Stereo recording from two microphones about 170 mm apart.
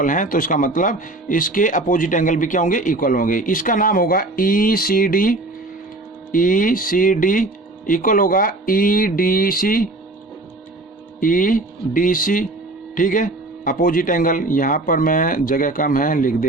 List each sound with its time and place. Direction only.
0.0 s speech: 50° left (ahead or behind)
11.2 s speech: 50° left (ahead or behind)